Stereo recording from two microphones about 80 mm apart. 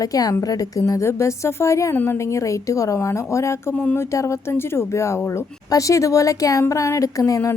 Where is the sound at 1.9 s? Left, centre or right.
Left.